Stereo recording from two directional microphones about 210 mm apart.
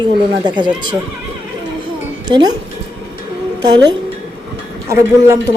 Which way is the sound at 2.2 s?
20° right (ahead or behind).